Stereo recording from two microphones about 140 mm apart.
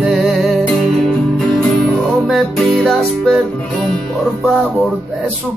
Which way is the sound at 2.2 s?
Centre (ahead or behind).